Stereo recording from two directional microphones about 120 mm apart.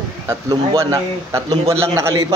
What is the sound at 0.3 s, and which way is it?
A man's voice, 25° right (ahead or behind).